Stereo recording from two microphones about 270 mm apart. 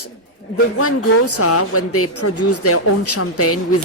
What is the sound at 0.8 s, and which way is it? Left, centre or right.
Speech, left.